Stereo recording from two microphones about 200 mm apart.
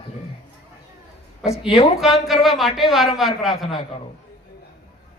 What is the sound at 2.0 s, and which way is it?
A woman's voice, centre (ahead or behind).